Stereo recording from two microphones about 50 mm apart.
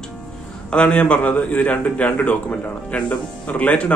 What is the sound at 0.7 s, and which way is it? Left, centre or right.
A man's voice, left.